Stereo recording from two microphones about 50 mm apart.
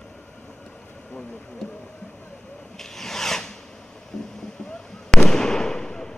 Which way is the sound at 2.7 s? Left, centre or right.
Centre.